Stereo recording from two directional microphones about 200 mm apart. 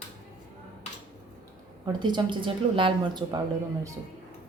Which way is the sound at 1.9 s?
20° right (ahead or behind).